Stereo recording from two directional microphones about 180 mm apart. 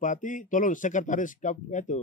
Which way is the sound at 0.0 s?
45° left (ahead or behind).